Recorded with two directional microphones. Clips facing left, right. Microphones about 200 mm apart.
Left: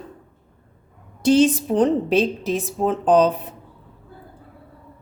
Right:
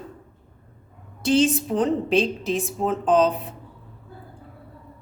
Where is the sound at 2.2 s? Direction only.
Centre (ahead or behind).